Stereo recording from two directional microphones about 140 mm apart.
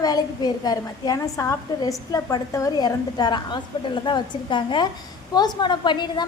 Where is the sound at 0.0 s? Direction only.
30° left (ahead or behind).